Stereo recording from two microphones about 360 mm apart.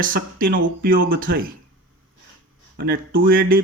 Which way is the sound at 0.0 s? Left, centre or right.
Right.